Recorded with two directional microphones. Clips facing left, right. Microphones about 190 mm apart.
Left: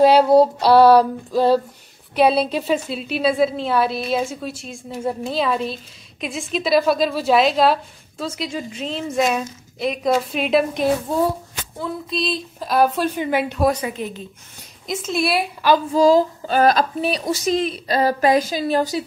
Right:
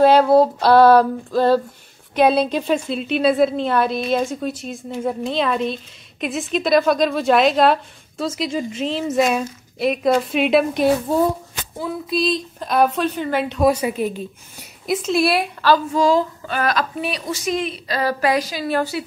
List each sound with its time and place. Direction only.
0.0 s female singing: 10° left (ahead or behind)
2.1 s a woman's voice: 5° left (ahead or behind)
13.9 s a woman's voice: 10° right (ahead or behind)
14.9 s a woman's voice: centre (ahead or behind)
15.9 s a woman's voice: 35° left (ahead or behind)